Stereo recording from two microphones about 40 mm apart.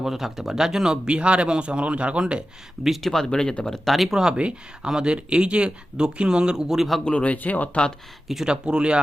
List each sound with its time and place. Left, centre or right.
0.0 s speech: centre; by 2.2 s right
3.0 s speech: centre
3.8 s speech: centre
4.4 s speech: right
6.7 s a man's voice: centre
7.0 s speech: left
8.4 s speech: right